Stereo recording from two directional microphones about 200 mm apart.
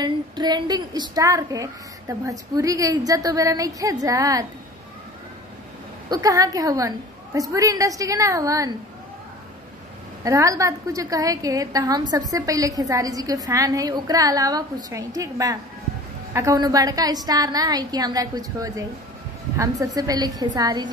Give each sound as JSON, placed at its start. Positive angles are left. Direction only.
{"t": 0.0, "sound": "a woman's voice", "side_deg": -20}
{"t": 6.0, "sound": "a woman's voice", "side_deg": -20}
{"t": 10.2, "sound": "a woman's voice", "side_deg": -15}